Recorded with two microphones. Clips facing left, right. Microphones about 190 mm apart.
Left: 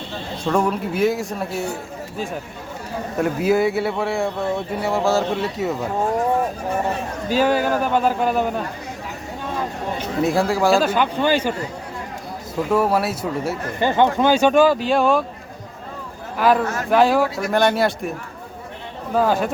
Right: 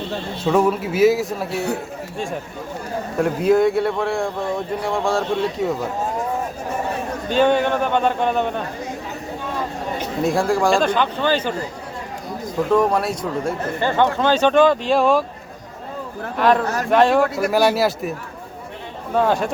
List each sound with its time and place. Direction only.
0.4 s speech: 5° right (ahead or behind)
1.5 s speech: 65° right (ahead or behind)
2.1 s speech: centre (ahead or behind)
7.3 s speech: 5° left (ahead or behind)
10.2 s speech: centre (ahead or behind)
12.6 s speech: 5° left (ahead or behind)
16.4 s speech: 5° left (ahead or behind)
19.1 s speech: centre (ahead or behind)